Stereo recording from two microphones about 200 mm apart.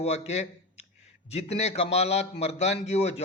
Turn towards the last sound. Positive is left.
turn(degrees=35)  # may be behind; listen again after turning